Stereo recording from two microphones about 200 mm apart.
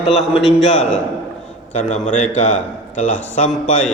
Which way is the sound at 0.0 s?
30° left (ahead or behind).